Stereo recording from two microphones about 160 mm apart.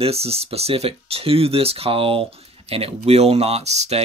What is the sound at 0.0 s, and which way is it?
Speech, 40° right (ahead or behind).